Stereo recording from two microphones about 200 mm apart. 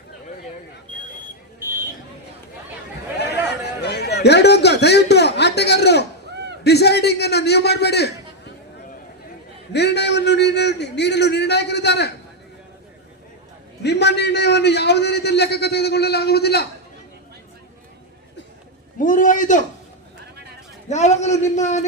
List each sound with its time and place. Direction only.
3.8 s a man's voice: 55° left (ahead or behind)
9.7 s a man's voice: 60° left (ahead or behind)
13.8 s a man's voice: 55° left (ahead or behind)
18.9 s a man's voice: 40° left (ahead or behind)
20.9 s a man's voice: 35° left (ahead or behind)